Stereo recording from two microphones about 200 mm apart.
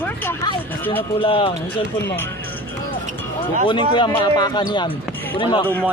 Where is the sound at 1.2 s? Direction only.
25° left (ahead or behind).